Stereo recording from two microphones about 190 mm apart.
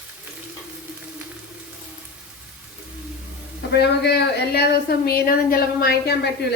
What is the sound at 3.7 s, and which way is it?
A woman's voice, 60° left (ahead or behind).